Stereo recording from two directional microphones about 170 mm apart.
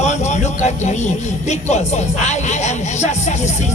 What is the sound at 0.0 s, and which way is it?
Speech, 45° left (ahead or behind).